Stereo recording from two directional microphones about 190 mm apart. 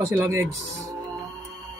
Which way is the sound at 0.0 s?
15° right (ahead or behind).